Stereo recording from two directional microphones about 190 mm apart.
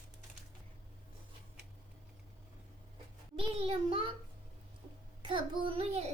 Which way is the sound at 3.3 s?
30° right (ahead or behind).